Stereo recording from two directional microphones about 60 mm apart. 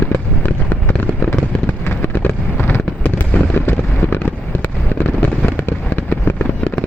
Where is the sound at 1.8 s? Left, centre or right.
Left.